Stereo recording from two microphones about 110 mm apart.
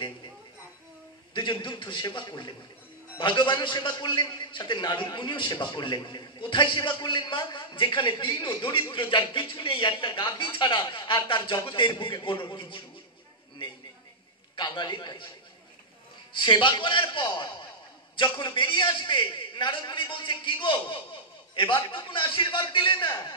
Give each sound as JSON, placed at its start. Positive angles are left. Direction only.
{"t": 1.3, "sound": "a man's voice", "side_deg": 45}
{"t": 14.5, "sound": "a man's voice", "side_deg": 45}
{"t": 16.3, "sound": "a man's voice", "side_deg": 50}